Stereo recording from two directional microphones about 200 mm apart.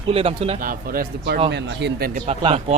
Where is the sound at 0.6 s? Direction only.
45° right (ahead or behind).